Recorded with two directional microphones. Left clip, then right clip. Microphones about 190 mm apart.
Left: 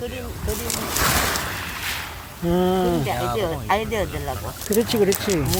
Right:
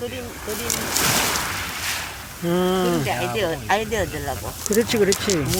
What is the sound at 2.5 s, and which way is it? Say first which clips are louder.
Speech: even; 10° left (ahead or behind).